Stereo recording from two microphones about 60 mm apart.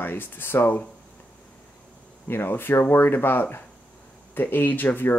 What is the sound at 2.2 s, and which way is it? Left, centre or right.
Speech, left.